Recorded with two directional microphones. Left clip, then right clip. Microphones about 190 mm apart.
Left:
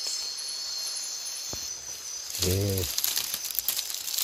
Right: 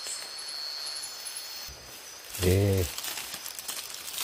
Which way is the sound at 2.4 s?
20° right (ahead or behind).